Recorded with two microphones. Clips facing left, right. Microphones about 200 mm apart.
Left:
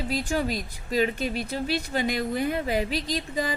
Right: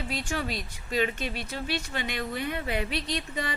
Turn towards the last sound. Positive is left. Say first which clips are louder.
# left 4 dB
turn(degrees=40)  # may be behind; listen again after turning